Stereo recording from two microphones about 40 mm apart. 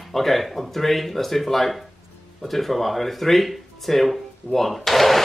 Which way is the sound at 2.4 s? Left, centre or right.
Centre.